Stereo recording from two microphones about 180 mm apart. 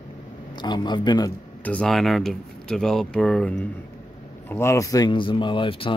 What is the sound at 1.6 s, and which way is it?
Speech, 5° left (ahead or behind).